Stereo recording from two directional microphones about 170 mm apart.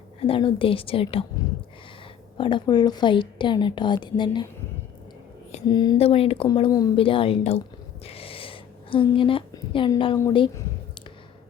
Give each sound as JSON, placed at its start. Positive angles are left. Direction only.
{"t": 0.2, "sound": "speech", "side_deg": 30}
{"t": 2.4, "sound": "a woman's voice", "side_deg": 30}
{"t": 5.6, "sound": "speech", "side_deg": 25}
{"t": 6.7, "sound": "a woman's voice", "side_deg": 20}
{"t": 6.9, "sound": "speech", "side_deg": 30}
{"t": 8.0, "sound": "a sound", "side_deg": 35}